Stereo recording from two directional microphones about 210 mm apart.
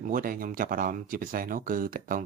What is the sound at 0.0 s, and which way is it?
Speech, 40° right (ahead or behind).